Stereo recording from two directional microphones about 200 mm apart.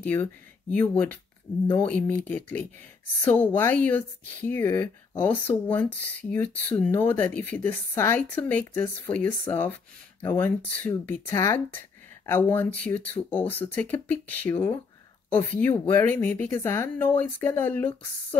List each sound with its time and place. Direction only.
0.0 s speech: 10° left (ahead or behind)